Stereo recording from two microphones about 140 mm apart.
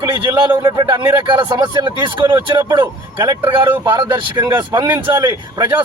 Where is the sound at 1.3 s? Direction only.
35° right (ahead or behind).